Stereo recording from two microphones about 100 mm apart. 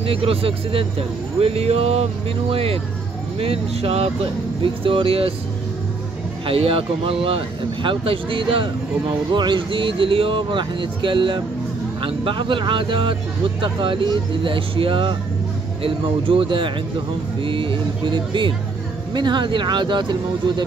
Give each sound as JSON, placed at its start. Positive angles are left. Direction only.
{"t": 0.0, "sound": "speech", "side_deg": -65}
{"t": 2.5, "sound": "speech", "side_deg": -70}
{"t": 6.4, "sound": "speech", "side_deg": -70}